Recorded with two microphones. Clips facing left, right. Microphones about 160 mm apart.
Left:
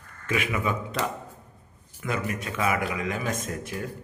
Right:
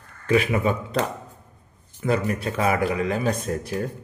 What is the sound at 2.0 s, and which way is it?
Speech, 35° right (ahead or behind).